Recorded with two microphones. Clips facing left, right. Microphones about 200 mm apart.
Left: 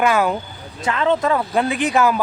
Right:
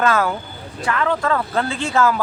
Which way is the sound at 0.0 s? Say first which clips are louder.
Left 1 dB; 15° left (ahead or behind).